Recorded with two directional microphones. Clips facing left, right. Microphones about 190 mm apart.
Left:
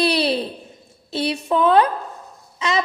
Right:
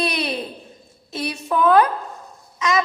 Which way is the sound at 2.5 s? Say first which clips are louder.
Right 1 dB; 30° left (ahead or behind).